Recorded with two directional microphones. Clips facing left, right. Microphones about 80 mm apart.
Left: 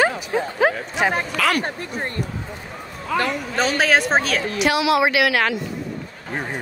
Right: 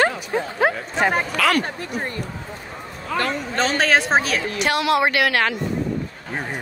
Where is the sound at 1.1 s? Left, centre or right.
Centre.